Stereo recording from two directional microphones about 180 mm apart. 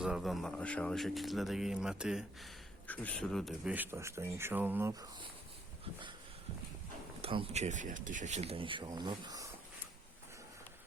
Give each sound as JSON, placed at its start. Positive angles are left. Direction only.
{"t": 0.0, "sound": "speech", "side_deg": 0}
{"t": 2.8, "sound": "speech", "side_deg": 10}
{"t": 7.2, "sound": "speech", "side_deg": -30}